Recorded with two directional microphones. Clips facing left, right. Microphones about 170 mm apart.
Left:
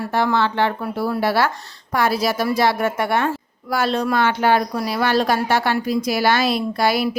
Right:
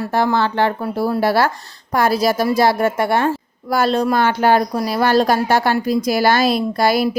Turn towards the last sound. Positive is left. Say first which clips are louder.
# right 3 dB
turn(degrees=-40)  # may be behind; listen again after turning